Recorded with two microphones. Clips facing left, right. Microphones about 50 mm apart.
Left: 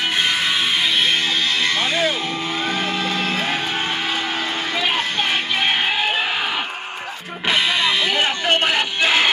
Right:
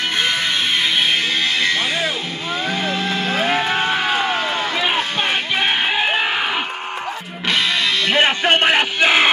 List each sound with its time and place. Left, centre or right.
1.6 s music: centre
3.3 s music: right
7.4 s music: centre
8.1 s a sound: right